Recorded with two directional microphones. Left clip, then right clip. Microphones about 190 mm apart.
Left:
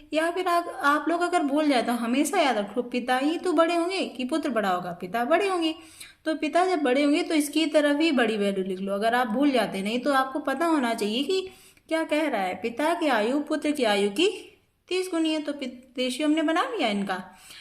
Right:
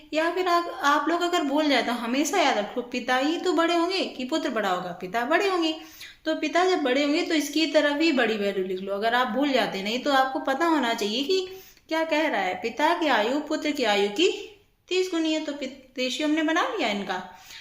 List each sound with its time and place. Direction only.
0.1 s a woman's voice: 40° left (ahead or behind)